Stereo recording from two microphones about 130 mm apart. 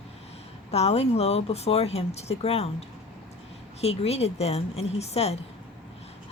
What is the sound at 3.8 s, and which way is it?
Speech, 50° left (ahead or behind).